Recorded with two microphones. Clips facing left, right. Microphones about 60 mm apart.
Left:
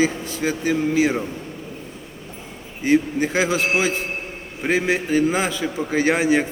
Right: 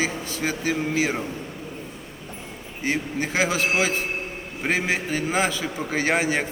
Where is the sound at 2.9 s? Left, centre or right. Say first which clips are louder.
Left 7 dB; centre.